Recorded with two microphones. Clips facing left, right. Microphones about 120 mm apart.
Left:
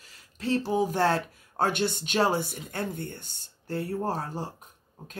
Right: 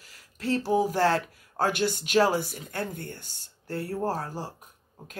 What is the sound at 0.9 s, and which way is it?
Speech, 20° left (ahead or behind).